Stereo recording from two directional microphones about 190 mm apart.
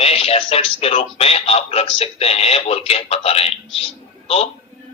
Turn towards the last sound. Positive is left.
turn(degrees=30)  # may be behind; listen again after turning